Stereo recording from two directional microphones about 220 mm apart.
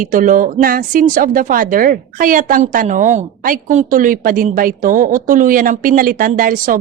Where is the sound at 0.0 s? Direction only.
35° right (ahead or behind).